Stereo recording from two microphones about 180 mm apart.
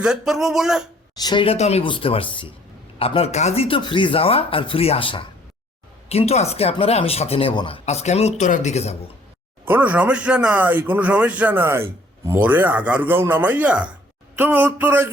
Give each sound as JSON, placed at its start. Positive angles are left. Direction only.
{"t": 0.0, "sound": "speech", "side_deg": -5}
{"t": 1.1, "sound": "speech", "side_deg": 25}
{"t": 9.6, "sound": "speech", "side_deg": -10}